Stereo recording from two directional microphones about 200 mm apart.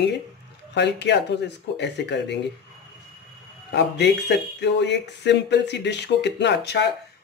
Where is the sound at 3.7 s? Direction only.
60° left (ahead or behind).